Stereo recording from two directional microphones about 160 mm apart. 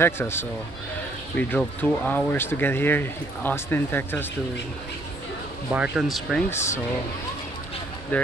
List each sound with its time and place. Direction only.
0.0 s speech: 15° left (ahead or behind)
5.7 s speech: 5° right (ahead or behind)
6.5 s speech: 15° left (ahead or behind)
8.1 s speech: 10° left (ahead or behind)